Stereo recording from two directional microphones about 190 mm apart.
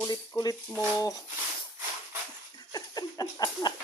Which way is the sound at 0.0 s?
20° left (ahead or behind).